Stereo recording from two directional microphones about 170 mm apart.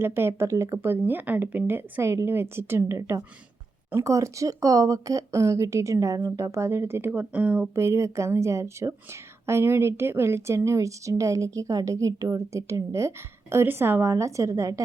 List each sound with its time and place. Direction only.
0.0 s speech: 15° right (ahead or behind)